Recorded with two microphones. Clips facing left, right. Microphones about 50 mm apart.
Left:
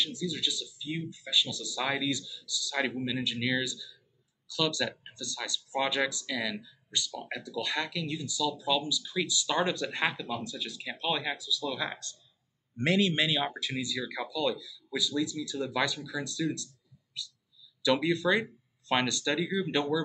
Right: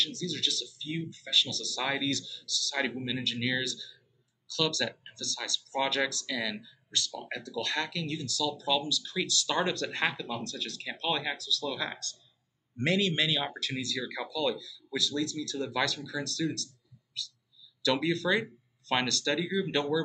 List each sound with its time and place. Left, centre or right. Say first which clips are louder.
0.0 s speech: even; centre
17.2 s a sound: right 2 dB; centre
17.8 s speech: left 2 dB; centre